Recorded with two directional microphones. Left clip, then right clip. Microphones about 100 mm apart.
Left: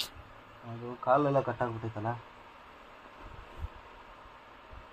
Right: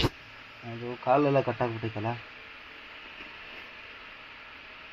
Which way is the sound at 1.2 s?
65° right (ahead or behind).